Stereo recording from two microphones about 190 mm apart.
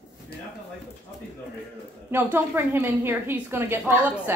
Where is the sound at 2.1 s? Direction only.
10° right (ahead or behind).